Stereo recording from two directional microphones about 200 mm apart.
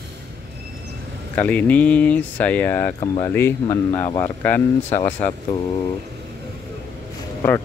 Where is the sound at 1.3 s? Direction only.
5° left (ahead or behind).